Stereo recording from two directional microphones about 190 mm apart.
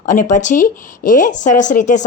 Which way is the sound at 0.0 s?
40° left (ahead or behind).